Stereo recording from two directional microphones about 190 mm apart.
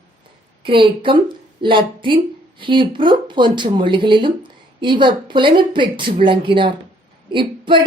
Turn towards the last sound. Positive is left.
turn(degrees=-25)  # may be behind; listen again after turning